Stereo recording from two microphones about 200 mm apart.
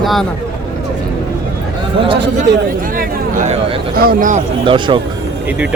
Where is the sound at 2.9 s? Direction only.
40° right (ahead or behind).